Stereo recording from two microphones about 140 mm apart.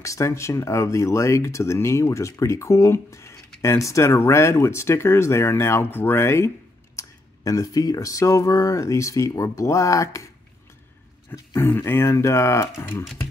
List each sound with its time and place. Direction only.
0.0 s speech: 20° left (ahead or behind)
11.3 s speech: 15° left (ahead or behind)